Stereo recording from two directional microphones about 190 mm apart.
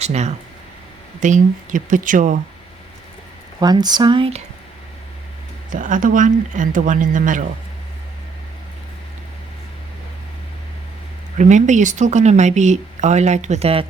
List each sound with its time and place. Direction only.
0.0 s speech: 35° right (ahead or behind)
3.6 s speech: 20° right (ahead or behind)
5.7 s speech: 45° right (ahead or behind)
11.3 s speech: 40° right (ahead or behind)